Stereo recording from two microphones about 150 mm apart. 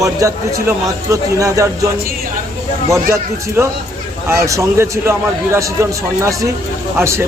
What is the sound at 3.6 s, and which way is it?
Speech, 20° right (ahead or behind).